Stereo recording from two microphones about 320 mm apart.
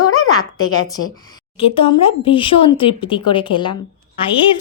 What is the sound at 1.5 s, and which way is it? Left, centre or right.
Speech, centre.